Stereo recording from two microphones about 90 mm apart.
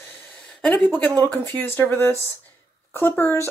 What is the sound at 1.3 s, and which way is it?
Speech, 20° left (ahead or behind).